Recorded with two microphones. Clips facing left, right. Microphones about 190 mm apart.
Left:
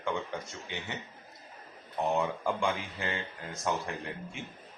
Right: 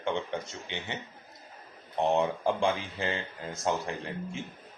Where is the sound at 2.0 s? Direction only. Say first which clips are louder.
Right 4 dB; 25° right (ahead or behind).